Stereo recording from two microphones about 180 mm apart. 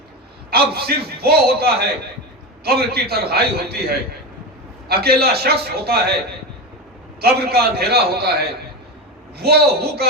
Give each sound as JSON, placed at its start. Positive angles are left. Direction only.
{"t": 0.5, "sound": "a man's voice", "side_deg": -60}
{"t": 7.2, "sound": "a man's voice", "side_deg": -60}
{"t": 9.4, "sound": "a man's voice", "side_deg": -60}